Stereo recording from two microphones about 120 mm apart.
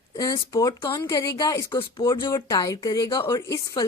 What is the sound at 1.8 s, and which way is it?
Speech, 40° left (ahead or behind).